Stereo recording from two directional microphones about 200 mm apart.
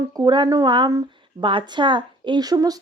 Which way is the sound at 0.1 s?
20° right (ahead or behind).